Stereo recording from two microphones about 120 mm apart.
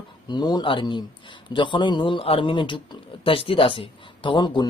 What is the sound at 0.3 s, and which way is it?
Speech, 35° left (ahead or behind).